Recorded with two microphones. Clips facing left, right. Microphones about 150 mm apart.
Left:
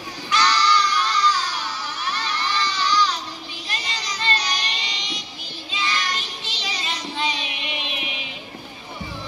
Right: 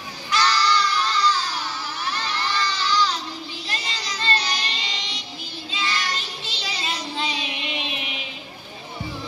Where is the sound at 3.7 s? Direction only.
35° right (ahead or behind).